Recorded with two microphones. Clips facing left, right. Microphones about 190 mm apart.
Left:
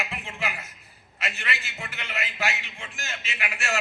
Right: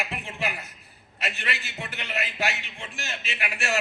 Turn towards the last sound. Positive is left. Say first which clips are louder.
# right 2 dB
turn(degrees=-35)  # may be behind; listen again after turning